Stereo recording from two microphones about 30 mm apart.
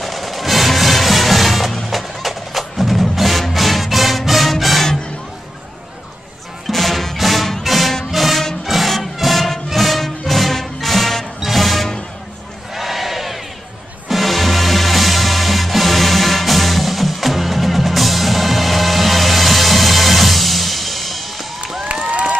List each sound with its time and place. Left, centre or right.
0.0 s music: centre
6.7 s music: centre
12.7 s crowd: centre
14.0 s music: centre
21.8 s a sound: right